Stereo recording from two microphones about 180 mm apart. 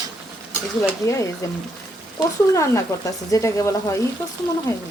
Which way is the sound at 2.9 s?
15° left (ahead or behind).